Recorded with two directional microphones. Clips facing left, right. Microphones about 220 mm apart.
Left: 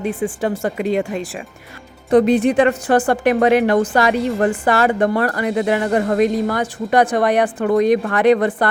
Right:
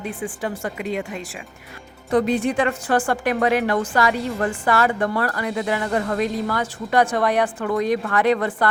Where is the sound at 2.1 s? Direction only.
20° left (ahead or behind).